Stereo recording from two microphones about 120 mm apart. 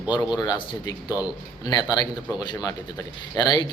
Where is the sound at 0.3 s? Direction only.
35° left (ahead or behind).